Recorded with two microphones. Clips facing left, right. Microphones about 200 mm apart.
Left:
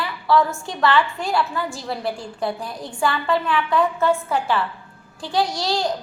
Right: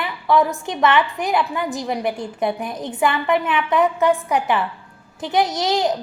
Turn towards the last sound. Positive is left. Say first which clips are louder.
# right 3 dB
turn(degrees=-20)  # may be behind; listen again after turning